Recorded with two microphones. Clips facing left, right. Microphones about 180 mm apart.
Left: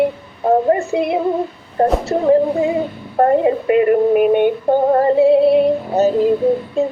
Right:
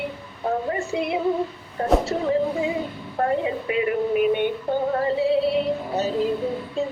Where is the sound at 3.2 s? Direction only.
50° left (ahead or behind).